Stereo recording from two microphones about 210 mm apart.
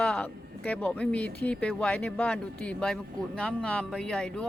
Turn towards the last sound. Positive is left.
turn(degrees=5)  # may be behind; listen again after turning